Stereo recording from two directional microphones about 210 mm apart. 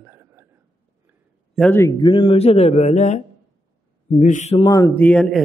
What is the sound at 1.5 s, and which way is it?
Speech, 5° left (ahead or behind).